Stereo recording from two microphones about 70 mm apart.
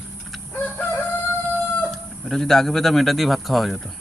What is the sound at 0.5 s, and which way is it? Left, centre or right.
Crowing, left.